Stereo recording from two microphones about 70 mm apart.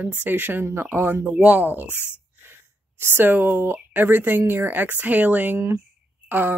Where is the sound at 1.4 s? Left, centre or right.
Right.